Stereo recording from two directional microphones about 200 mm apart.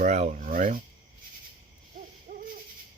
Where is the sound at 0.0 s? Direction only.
35° right (ahead or behind).